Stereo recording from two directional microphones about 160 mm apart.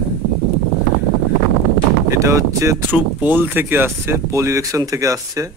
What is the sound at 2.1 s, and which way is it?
Speech, 20° right (ahead or behind).